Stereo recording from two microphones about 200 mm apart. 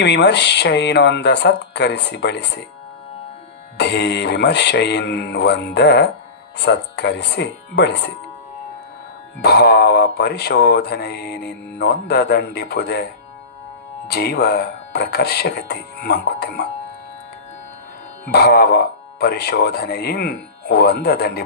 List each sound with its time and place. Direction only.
0.0 s speech: 60° left (ahead or behind)
3.8 s speech: 60° left (ahead or behind)
9.4 s speech: 55° left (ahead or behind)
14.1 s speech: 55° left (ahead or behind)
18.3 s speech: 50° left (ahead or behind)